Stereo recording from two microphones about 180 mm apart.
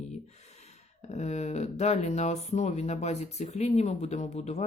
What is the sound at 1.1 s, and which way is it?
Speech, 40° left (ahead or behind).